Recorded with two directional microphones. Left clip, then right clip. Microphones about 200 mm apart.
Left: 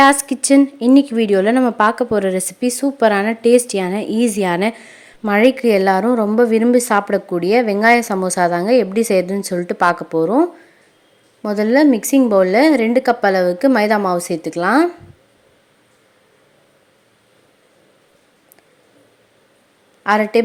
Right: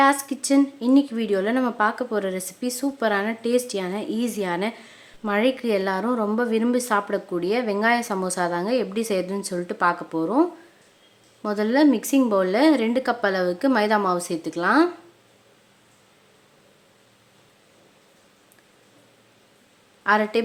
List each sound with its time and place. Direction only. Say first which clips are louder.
0.0 s speech: left 7 dB; 30° left (ahead or behind)
20.1 s speech: left 6 dB; 20° left (ahead or behind)